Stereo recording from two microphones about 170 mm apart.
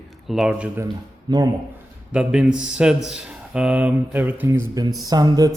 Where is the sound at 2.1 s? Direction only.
5° right (ahead or behind).